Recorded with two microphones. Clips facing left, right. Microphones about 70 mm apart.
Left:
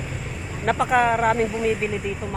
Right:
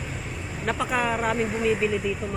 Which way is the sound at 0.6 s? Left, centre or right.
Left.